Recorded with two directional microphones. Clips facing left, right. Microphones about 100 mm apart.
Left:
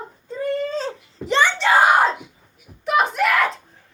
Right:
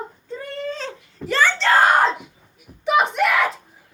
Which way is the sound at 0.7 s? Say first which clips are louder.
Left 5 dB; 35° left (ahead or behind).